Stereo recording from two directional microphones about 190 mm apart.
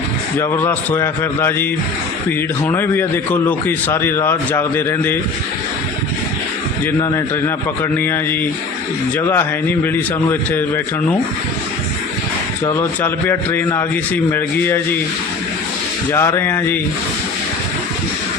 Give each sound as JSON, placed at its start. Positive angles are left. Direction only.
{"t": 0.3, "sound": "speech", "side_deg": 15}
{"t": 2.6, "sound": "speech", "side_deg": 10}
{"t": 7.0, "sound": "speech", "side_deg": 15}
{"t": 12.6, "sound": "speech", "side_deg": 10}
{"t": 16.1, "sound": "speech", "side_deg": 15}